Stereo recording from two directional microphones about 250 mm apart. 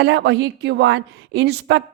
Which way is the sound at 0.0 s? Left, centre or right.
Right.